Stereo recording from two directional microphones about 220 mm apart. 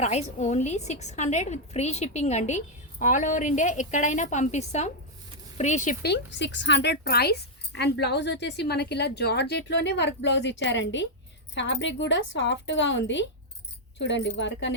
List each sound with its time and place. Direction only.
0.0 s a woman's voice: 30° left (ahead or behind); by 14.8 s 55° left (ahead or behind)